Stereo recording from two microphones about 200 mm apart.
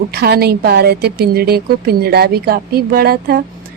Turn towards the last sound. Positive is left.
turn(degrees=-50)  # may be behind; listen again after turning